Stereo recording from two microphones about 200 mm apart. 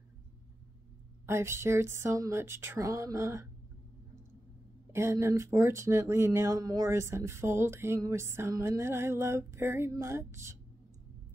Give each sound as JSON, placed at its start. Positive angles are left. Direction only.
{"t": 1.2, "sound": "speech", "side_deg": -15}
{"t": 4.9, "sound": "speech", "side_deg": -15}